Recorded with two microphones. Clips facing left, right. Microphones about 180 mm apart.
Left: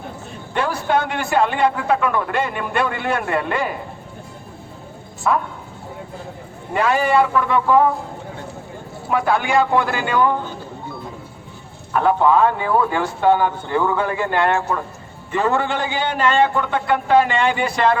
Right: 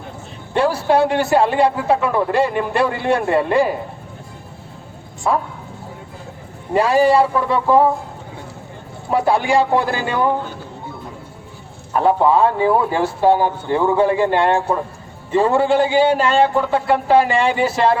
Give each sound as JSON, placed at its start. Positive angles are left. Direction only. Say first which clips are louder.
{"t": 0.5, "sound": "a man's voice", "louder": "right 4 dB", "side_deg": -30}
{"t": 6.7, "sound": "a man's voice", "louder": "right 3 dB", "side_deg": -35}
{"t": 9.0, "sound": "a man's voice", "louder": "right 3 dB", "side_deg": -30}
{"t": 11.9, "sound": "a man's voice", "louder": "right 1 dB", "side_deg": -30}